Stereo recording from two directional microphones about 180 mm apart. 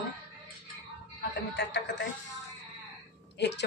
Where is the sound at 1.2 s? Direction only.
75° left (ahead or behind).